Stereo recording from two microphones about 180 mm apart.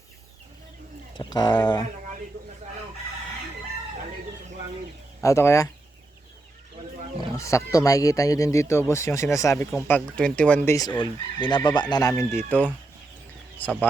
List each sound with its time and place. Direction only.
1.1 s speech: 25° left (ahead or behind)
5.2 s speech: 15° left (ahead or behind)
7.3 s speech: 15° left (ahead or behind)
10.8 s speech: 25° left (ahead or behind)